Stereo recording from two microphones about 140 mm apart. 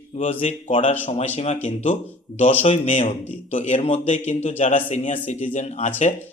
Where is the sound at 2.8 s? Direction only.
60° left (ahead or behind).